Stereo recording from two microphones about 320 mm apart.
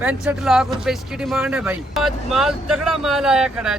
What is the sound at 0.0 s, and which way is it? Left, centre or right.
Speech, centre.